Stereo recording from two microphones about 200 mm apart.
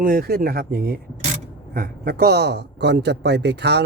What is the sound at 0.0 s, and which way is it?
A man's voice, 45° right (ahead or behind).